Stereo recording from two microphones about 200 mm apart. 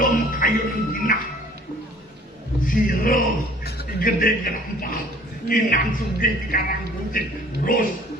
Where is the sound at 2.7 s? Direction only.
45° left (ahead or behind).